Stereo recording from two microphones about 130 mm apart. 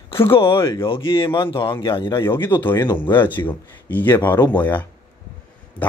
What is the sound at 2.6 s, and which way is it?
Speech, 15° left (ahead or behind).